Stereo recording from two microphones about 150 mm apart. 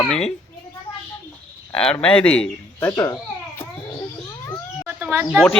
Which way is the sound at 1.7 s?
5° left (ahead or behind).